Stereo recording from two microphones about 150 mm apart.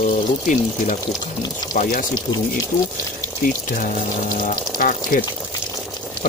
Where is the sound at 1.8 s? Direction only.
65° left (ahead or behind).